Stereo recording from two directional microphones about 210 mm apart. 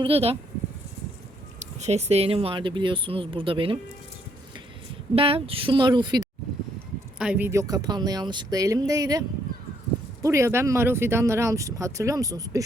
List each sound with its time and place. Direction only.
0.0 s speech: 30° right (ahead or behind)
1.5 s speech: 30° right (ahead or behind)
5.1 s speech: 25° right (ahead or behind)
7.2 s speech: 5° right (ahead or behind)
10.2 s speech: 15° right (ahead or behind)